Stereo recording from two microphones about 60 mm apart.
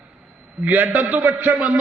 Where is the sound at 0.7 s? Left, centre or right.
Right.